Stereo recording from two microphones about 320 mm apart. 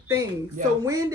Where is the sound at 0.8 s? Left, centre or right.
Centre.